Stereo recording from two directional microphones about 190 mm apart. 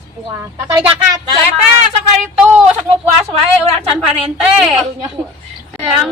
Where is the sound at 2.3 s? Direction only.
5° right (ahead or behind).